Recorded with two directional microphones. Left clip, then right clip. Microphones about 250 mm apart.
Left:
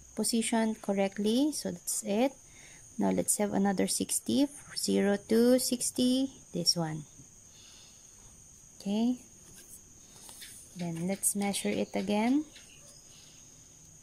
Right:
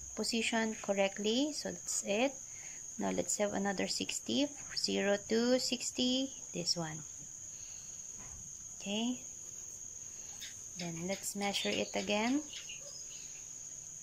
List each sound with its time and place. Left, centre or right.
0.1 s speech: left
8.8 s speech: left
11.1 s speech: centre